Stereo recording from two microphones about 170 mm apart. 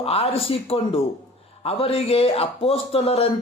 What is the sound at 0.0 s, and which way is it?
A man's voice, 35° left (ahead or behind).